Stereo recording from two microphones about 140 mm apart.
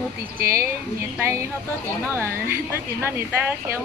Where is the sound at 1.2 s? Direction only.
20° right (ahead or behind).